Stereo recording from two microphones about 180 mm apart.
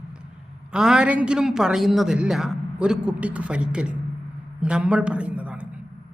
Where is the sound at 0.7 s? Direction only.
5° right (ahead or behind).